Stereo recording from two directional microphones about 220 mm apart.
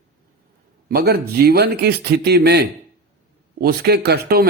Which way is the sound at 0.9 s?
45° right (ahead or behind).